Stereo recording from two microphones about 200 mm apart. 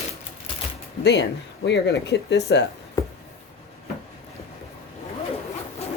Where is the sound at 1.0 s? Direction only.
55° left (ahead or behind).